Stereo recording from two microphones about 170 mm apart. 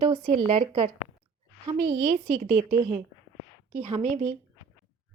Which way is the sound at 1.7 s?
55° right (ahead or behind).